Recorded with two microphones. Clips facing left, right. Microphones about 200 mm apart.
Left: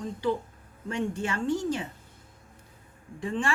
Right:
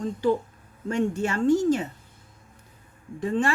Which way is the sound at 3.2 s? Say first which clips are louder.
Right 5 dB; 40° right (ahead or behind).